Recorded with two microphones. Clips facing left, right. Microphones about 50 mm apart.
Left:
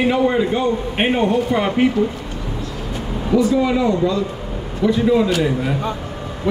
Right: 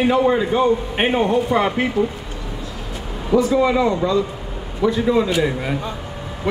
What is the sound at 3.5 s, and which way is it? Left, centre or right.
Speech, centre.